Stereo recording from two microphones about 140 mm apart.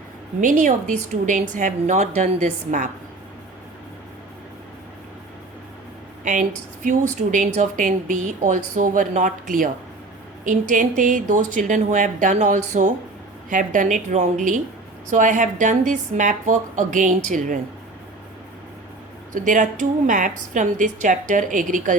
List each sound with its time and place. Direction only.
0.4 s a woman's voice: 65° right (ahead or behind)
6.8 s a woman's voice: 60° right (ahead or behind)
13.5 s a woman's voice: 70° right (ahead or behind)
19.3 s a woman's voice: 65° right (ahead or behind)